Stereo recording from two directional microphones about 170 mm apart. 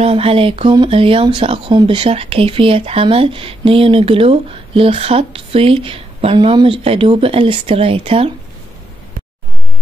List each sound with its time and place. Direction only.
0.0 s speech: 35° right (ahead or behind)